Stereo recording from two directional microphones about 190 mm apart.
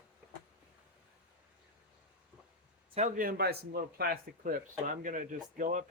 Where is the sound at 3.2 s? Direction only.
50° right (ahead or behind).